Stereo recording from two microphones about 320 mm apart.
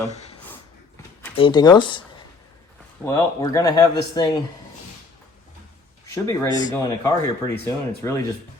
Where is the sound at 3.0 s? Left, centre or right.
Centre.